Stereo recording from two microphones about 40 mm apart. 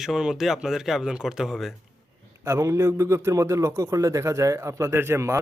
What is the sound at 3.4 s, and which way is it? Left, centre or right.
Speech, right.